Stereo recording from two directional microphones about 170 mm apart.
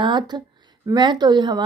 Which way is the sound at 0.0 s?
25° right (ahead or behind).